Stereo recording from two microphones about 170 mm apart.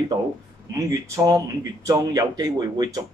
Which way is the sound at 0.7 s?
20° right (ahead or behind).